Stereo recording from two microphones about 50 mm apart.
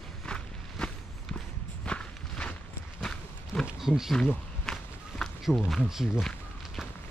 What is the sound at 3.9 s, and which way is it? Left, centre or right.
Speech, centre.